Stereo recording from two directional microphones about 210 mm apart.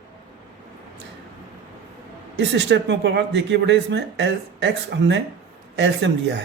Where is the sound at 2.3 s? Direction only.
55° right (ahead or behind).